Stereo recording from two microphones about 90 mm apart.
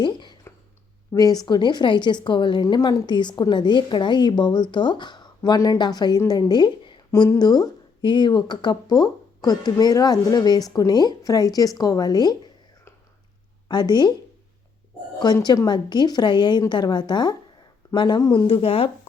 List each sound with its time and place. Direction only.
0.0 s a sound: 55° left (ahead or behind)
1.1 s speech: 45° left (ahead or behind)
1.5 s speech: 55° left (ahead or behind)
13.7 s speech: 55° left (ahead or behind)
15.2 s speech: 50° left (ahead or behind)
18.4 s speech: 90° left